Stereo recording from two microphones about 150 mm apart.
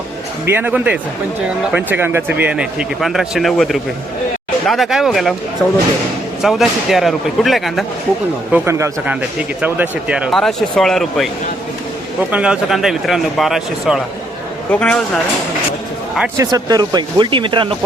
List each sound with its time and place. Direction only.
0.4 s speech: 10° right (ahead or behind)
6.4 s speech: centre (ahead or behind)
8.5 s speech: 15° right (ahead or behind); by 11.3 s centre (ahead or behind)
12.3 s speech: 5° right (ahead or behind)
14.7 s speech: 10° left (ahead or behind)
16.4 s speech: 25° right (ahead or behind)